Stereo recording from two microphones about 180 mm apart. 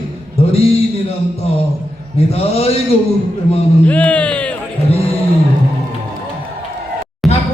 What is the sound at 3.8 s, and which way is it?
Speech, 10° left (ahead or behind).